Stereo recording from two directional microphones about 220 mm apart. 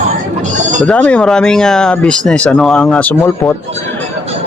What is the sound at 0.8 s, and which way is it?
Speech, 5° left (ahead or behind).